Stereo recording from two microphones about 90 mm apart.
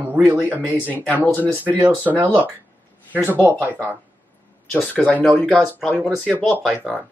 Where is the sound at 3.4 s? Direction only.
25° right (ahead or behind).